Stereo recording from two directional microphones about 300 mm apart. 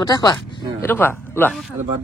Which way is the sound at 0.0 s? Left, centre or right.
Centre.